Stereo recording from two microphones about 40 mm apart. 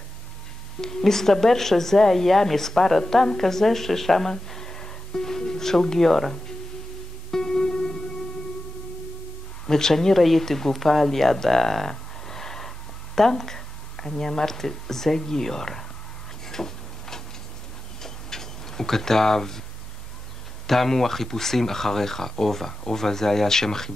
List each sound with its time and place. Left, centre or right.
0.7 s a woman's voice: centre
4.3 s music: centre
9.7 s a woman's voice: centre
11.9 s a sound: centre
18.0 s tick-tock: centre
20.6 s a woman's voice: centre